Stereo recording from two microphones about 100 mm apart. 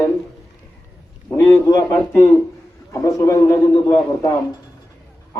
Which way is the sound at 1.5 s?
30° left (ahead or behind).